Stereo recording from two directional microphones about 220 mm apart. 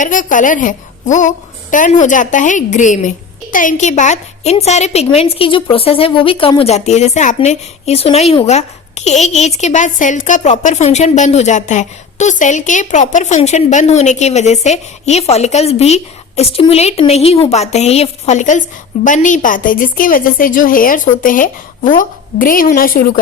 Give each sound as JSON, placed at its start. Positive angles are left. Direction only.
{"t": 0.0, "sound": "a woman's voice", "side_deg": 35}